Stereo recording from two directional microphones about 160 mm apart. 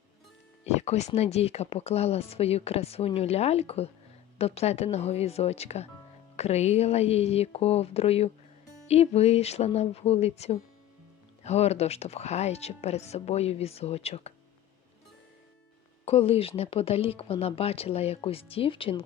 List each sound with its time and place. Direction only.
0.6 s speech: 45° left (ahead or behind)
16.0 s speech: 40° left (ahead or behind)